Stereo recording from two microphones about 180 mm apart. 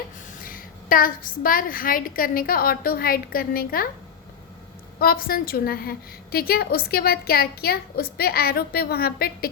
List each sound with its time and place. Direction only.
0.4 s a woman's voice: 50° left (ahead or behind)
4.9 s a woman's voice: 55° left (ahead or behind)